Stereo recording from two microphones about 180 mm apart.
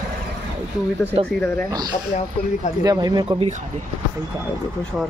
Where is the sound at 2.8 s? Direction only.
20° right (ahead or behind).